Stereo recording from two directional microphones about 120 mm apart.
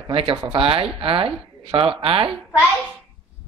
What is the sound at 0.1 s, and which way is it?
Speech, 45° right (ahead or behind).